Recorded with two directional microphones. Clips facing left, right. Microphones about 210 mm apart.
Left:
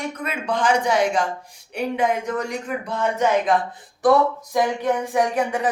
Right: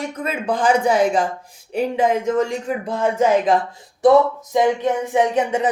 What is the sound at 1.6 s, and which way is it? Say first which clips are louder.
A man's voice: right 3 dB; 35° right (ahead or behind).